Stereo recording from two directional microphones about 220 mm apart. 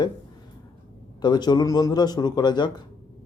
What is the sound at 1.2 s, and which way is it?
A man's voice, 20° left (ahead or behind).